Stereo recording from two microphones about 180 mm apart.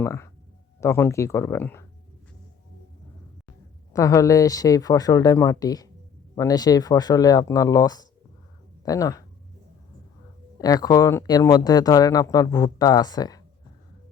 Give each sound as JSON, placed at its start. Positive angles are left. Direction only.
{"t": 0.0, "sound": "speech", "side_deg": 15}
{"t": 3.9, "sound": "speech", "side_deg": 20}
{"t": 10.6, "sound": "speech", "side_deg": 20}